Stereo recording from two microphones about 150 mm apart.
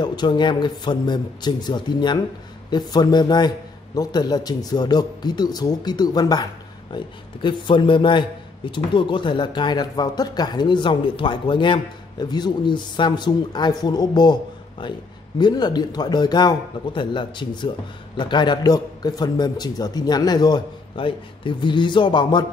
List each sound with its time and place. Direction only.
0.0 s a man's voice: 30° left (ahead or behind)
7.4 s a man's voice: 30° left (ahead or behind)